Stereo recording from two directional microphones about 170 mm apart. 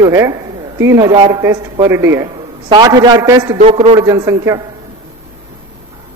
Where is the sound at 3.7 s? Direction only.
30° right (ahead or behind).